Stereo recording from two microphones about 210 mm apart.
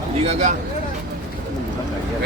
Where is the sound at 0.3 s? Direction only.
35° right (ahead or behind).